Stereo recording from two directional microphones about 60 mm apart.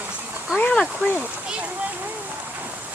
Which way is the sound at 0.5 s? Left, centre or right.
Centre.